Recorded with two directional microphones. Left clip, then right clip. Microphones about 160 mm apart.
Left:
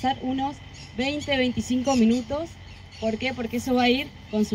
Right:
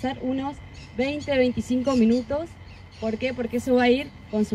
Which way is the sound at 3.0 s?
30° left (ahead or behind).